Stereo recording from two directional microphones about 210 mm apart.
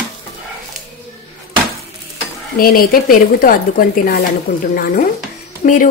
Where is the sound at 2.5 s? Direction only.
45° left (ahead or behind).